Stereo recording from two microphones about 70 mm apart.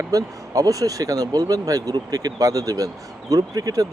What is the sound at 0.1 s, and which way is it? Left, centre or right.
Speech, right.